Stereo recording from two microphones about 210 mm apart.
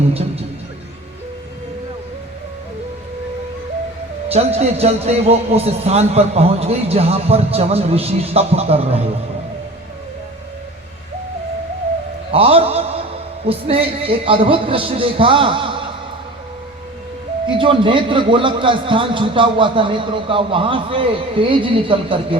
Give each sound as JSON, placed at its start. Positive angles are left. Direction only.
{"t": 0.1, "sound": "a man's voice", "side_deg": -30}
{"t": 4.3, "sound": "a man's voice", "side_deg": -30}
{"t": 12.3, "sound": "a man's voice", "side_deg": -30}
{"t": 17.6, "sound": "a man's voice", "side_deg": -25}